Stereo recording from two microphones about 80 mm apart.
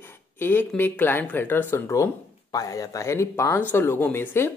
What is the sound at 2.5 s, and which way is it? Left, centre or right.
Speech, left.